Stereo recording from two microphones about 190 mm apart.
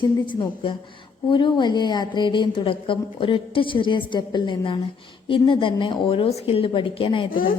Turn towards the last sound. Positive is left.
turn(degrees=50)  # may be behind; listen again after turning